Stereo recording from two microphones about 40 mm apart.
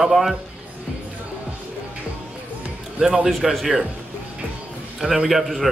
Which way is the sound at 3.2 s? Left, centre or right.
Centre.